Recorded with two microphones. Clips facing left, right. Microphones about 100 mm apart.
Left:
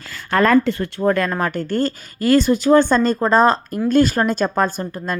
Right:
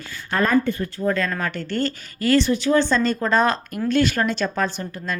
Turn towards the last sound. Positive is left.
turn(degrees=45)  # may be behind; listen again after turning